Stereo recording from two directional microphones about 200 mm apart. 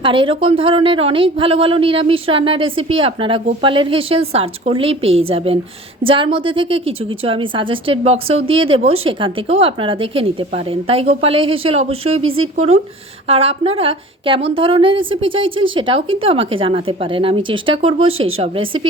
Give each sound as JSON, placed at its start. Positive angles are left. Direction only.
{"t": 0.0, "sound": "a woman's voice", "side_deg": -25}
{"t": 6.1, "sound": "a woman's voice", "side_deg": -25}